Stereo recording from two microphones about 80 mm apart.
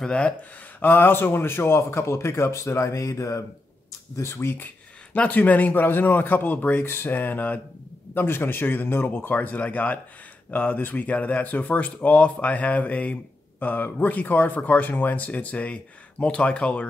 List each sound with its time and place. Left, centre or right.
0.0 s speech: centre
0.7 s a man's voice: left
5.1 s speech: centre